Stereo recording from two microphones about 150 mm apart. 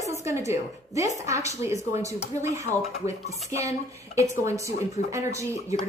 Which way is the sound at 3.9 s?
20° right (ahead or behind).